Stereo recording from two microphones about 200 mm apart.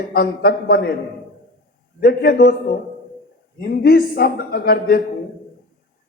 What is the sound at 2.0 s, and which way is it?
Speech, 50° left (ahead or behind).